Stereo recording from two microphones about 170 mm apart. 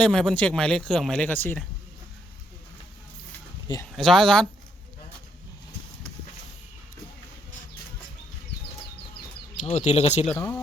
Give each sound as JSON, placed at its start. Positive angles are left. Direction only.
{"t": 0.0, "sound": "speech", "side_deg": 5}
{"t": 3.9, "sound": "speech", "side_deg": 0}
{"t": 9.6, "sound": "speech", "side_deg": 40}
{"t": 10.2, "sound": "speech", "side_deg": 10}